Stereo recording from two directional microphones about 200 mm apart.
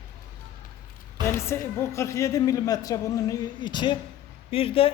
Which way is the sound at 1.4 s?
15° left (ahead or behind).